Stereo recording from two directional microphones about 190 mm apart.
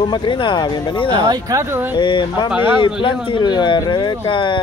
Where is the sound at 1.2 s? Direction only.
20° right (ahead or behind).